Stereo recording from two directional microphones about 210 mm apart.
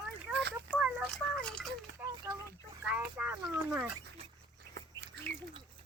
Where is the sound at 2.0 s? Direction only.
15° right (ahead or behind).